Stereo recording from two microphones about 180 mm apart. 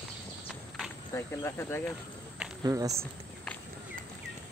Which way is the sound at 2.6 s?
20° right (ahead or behind).